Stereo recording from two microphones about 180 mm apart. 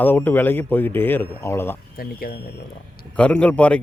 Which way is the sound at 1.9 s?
55° left (ahead or behind).